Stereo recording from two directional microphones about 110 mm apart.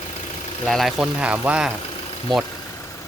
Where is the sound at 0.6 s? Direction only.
Centre (ahead or behind).